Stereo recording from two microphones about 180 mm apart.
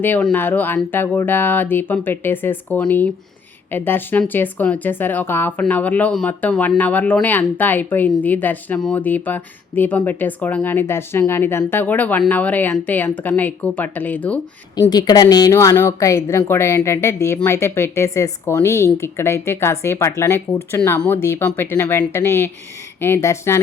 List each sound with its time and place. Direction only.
0.0 s speech: 10° left (ahead or behind)
14.8 s speech: 20° left (ahead or behind)